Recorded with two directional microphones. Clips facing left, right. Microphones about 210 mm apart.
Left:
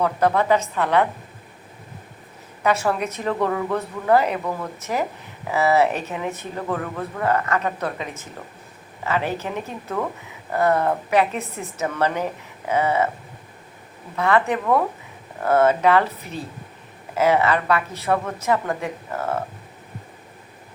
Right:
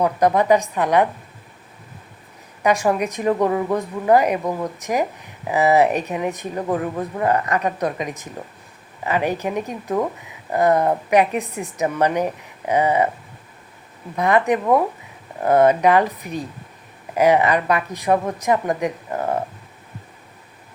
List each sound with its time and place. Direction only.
0.0 s speech: 15° right (ahead or behind)
2.6 s speech: 15° right (ahead or behind)
14.2 s speech: 15° right (ahead or behind)